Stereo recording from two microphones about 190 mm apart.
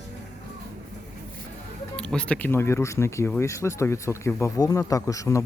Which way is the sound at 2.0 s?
5° left (ahead or behind).